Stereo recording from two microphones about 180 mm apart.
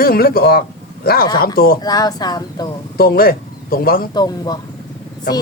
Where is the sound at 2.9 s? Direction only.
55° left (ahead or behind).